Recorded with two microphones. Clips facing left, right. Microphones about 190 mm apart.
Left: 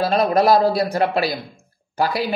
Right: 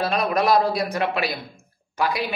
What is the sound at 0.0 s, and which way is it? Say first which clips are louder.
Speech: left 5 dB; 35° left (ahead or behind).